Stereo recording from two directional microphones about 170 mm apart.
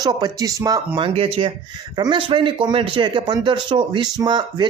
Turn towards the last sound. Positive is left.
turn(degrees=-25)  # may be behind; listen again after turning